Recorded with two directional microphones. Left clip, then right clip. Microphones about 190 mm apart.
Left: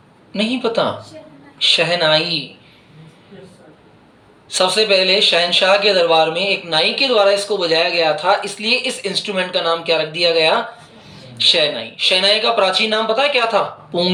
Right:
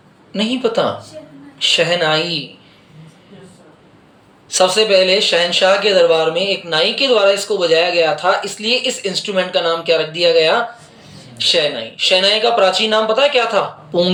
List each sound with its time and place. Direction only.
0.3 s speech: 15° right (ahead or behind)
4.5 s speech: 15° right (ahead or behind)